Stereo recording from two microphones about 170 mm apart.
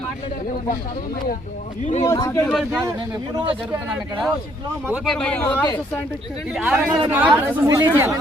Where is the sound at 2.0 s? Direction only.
20° left (ahead or behind).